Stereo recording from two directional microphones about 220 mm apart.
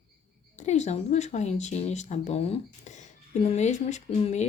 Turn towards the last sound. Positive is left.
turn(degrees=30)  # may be behind; listen again after turning